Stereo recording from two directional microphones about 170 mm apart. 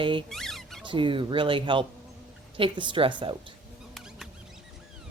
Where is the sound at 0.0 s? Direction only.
30° right (ahead or behind).